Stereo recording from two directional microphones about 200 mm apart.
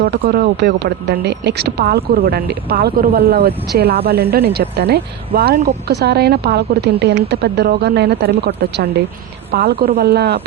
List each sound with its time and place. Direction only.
0.0 s speech: 55° right (ahead or behind)
9.5 s speech: 50° right (ahead or behind)